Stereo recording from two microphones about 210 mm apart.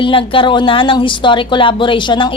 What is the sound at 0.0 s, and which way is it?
Speech, 25° left (ahead or behind).